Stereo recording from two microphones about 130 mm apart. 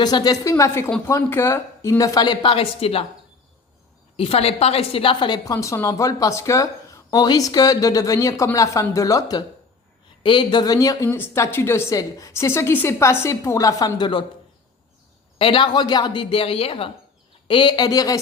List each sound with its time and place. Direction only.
0.0 s a woman's voice: 35° left (ahead or behind); by 3.1 s 50° left (ahead or behind)
4.2 s a woman's voice: 50° left (ahead or behind)
15.4 s a man's voice: 40° left (ahead or behind)